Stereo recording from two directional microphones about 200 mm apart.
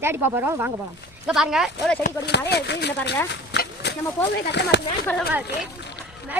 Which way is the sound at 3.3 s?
55° left (ahead or behind).